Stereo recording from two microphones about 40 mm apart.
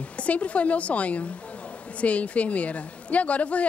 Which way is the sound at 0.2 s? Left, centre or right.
Left.